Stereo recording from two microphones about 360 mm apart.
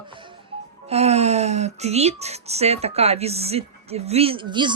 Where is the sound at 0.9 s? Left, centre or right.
Centre.